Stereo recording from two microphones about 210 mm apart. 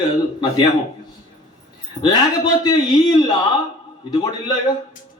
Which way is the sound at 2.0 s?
20° left (ahead or behind).